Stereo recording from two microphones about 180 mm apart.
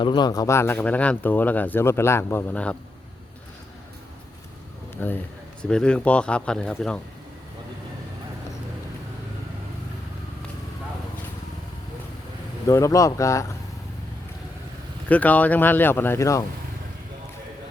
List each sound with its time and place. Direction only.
0.0 s speech: 25° left (ahead or behind); by 2.7 s 10° left (ahead or behind)
5.0 s speech: 10° left (ahead or behind)
12.6 s speech: 15° left (ahead or behind)
15.1 s speech: 10° left (ahead or behind)